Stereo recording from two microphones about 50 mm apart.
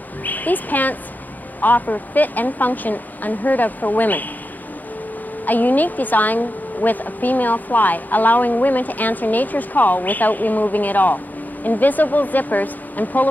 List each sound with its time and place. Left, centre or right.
0.2 s a woman's voice: left
5.4 s a woman's voice: left